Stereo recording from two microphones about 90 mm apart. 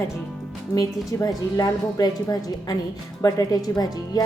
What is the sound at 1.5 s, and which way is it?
Speech, 45° left (ahead or behind).